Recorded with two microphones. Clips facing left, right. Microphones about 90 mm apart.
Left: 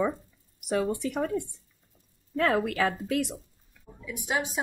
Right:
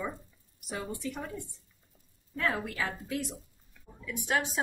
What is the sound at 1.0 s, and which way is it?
Speech, 80° left.